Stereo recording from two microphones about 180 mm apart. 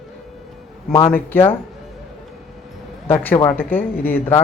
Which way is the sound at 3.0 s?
10° left (ahead or behind).